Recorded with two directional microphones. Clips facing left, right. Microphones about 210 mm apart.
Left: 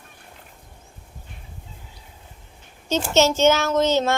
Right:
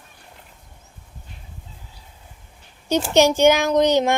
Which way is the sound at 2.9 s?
15° right (ahead or behind).